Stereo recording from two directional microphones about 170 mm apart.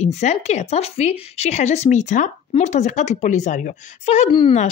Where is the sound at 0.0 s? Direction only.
40° left (ahead or behind).